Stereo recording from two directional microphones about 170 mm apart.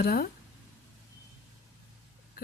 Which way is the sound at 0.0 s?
65° left (ahead or behind).